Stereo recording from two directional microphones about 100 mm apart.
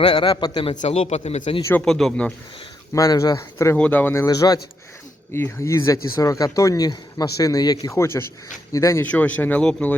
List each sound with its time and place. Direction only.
0.2 s a man's voice: 50° left (ahead or behind)
0.9 s a man's voice: 90° left
1.8 s speech: 5° left (ahead or behind)
2.9 s speech: 35° left (ahead or behind)
3.8 s speech: 15° left (ahead or behind)
4.3 s speech: 40° left (ahead or behind)
5.3 s speech: 25° left (ahead or behind)
7.9 s speech: 25° left (ahead or behind)
9.0 s speech: 15° left (ahead or behind)